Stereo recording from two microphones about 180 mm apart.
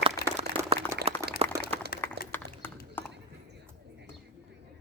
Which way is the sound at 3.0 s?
10° left (ahead or behind).